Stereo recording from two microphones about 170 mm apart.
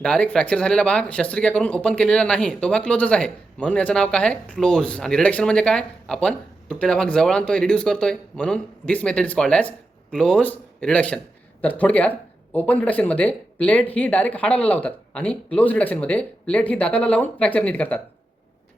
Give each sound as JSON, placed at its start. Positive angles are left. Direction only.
{"t": 0.0, "sound": "speech", "side_deg": 5}